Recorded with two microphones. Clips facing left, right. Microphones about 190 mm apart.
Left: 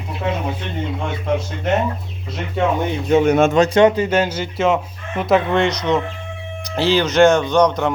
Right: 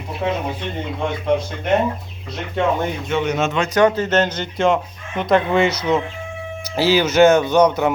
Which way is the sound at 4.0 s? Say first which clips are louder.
Left 1 dB; 10° left (ahead or behind).